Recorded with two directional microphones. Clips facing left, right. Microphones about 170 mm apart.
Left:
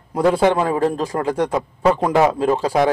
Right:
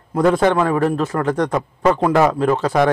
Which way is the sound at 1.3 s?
10° left (ahead or behind).